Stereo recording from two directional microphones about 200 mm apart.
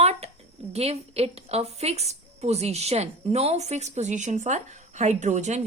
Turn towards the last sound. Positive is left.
turn(degrees=-35)  # may be behind; listen again after turning